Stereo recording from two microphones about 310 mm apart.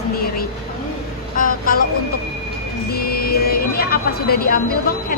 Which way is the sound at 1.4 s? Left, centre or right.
Left.